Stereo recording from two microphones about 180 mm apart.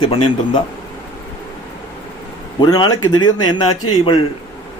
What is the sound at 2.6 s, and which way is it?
A man's voice, 25° left (ahead or behind).